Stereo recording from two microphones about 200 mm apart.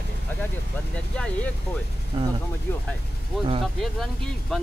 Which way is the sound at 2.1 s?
25° right (ahead or behind).